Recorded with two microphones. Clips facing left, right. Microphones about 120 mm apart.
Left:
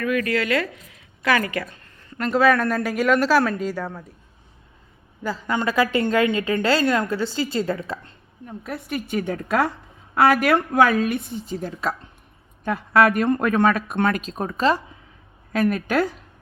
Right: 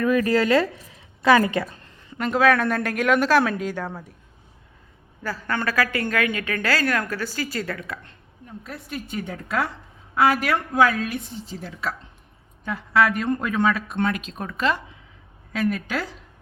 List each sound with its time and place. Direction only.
0.0 s a woman's voice: 35° right (ahead or behind)
2.1 s speech: centre (ahead or behind)
5.2 s a woman's voice: 20° left (ahead or behind)
8.4 s a woman's voice: 60° left (ahead or behind); by 11.9 s 45° left (ahead or behind)
12.6 s speech: 55° left (ahead or behind); by 14.8 s 35° left (ahead or behind)
15.5 s speech: 55° left (ahead or behind)